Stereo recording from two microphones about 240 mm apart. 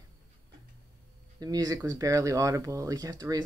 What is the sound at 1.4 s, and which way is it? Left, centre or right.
Speech, centre.